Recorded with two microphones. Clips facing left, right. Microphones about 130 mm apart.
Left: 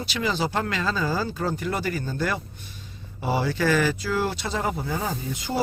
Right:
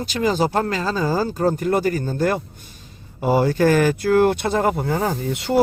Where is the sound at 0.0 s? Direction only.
45° right (ahead or behind).